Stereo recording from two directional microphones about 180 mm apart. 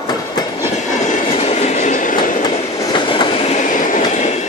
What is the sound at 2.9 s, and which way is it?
Train, 25° left (ahead or behind).